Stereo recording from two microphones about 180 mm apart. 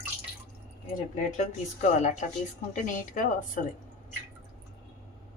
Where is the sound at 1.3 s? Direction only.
40° left (ahead or behind).